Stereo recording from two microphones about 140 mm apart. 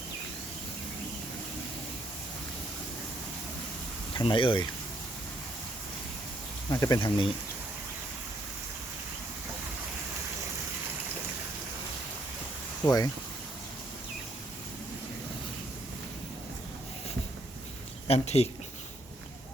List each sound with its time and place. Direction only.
4.2 s speech: 35° left (ahead or behind)
6.7 s speech: 25° left (ahead or behind)
12.8 s speech: 25° left (ahead or behind)
18.1 s speech: 50° left (ahead or behind)